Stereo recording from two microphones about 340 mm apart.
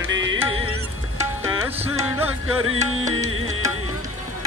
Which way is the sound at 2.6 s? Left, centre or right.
Right.